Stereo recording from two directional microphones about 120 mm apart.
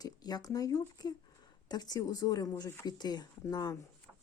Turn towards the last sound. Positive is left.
turn(degrees=35)  # may be behind; listen again after turning